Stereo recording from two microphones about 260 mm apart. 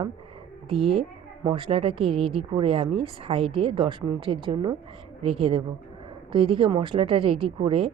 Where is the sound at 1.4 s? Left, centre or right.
Right.